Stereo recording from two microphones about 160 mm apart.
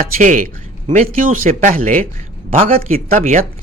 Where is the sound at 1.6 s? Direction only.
55° right (ahead or behind).